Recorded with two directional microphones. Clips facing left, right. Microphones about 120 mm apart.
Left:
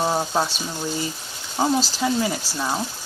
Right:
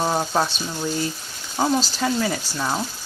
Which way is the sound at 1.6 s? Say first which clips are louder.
Even; 5° left (ahead or behind).